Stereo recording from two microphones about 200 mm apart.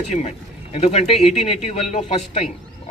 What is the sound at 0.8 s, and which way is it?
Speech, 30° left (ahead or behind).